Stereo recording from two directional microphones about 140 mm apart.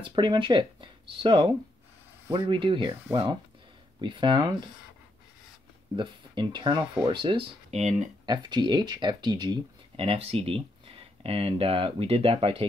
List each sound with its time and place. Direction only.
0.0 s speech: 35° right (ahead or behind)
4.0 s speech: 35° right (ahead or behind)
5.9 s speech: 35° right (ahead or behind)
7.7 s speech: 55° right (ahead or behind)
8.3 s speech: 30° right (ahead or behind)